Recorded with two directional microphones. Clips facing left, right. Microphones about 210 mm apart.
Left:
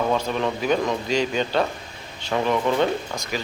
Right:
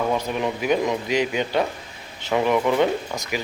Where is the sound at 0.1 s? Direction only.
15° right (ahead or behind).